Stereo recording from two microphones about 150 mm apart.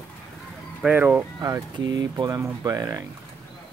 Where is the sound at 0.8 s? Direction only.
10° right (ahead or behind).